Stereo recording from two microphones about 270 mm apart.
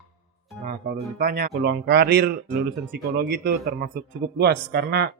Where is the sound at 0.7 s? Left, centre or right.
Right.